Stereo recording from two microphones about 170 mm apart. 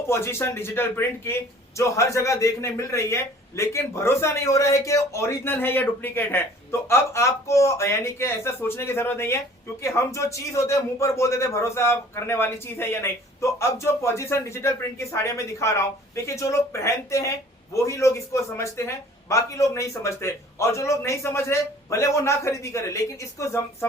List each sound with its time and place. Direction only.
0.1 s a man's voice: 15° left (ahead or behind)